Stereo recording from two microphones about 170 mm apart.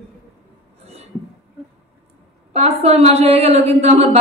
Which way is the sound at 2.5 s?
40° right (ahead or behind).